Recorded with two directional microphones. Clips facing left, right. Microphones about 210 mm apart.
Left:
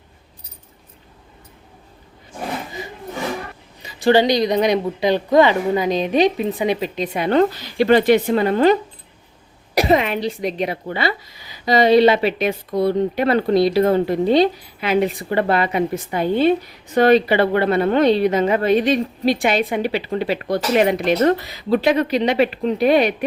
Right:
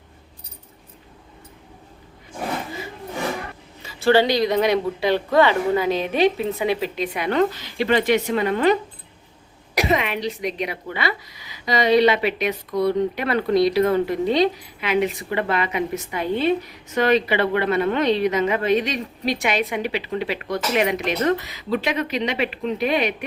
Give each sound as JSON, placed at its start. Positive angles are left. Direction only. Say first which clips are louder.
{"t": 3.8, "sound": "a woman's voice", "louder": "left 2 dB", "side_deg": 15}